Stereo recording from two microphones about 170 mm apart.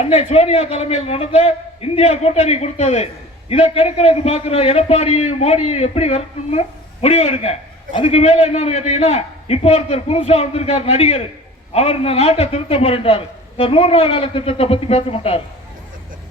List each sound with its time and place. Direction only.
0.0 s a man's voice: 40° left (ahead or behind)